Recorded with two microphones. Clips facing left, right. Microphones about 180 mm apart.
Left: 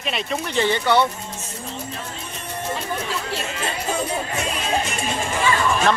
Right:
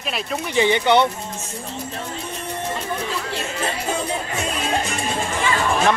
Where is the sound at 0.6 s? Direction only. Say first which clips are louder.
Right 3 dB; 15° right (ahead or behind).